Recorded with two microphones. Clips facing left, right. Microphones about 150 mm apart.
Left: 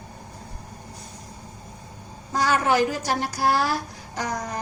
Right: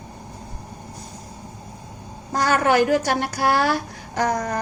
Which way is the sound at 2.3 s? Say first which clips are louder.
Right 3 dB; 50° right (ahead or behind).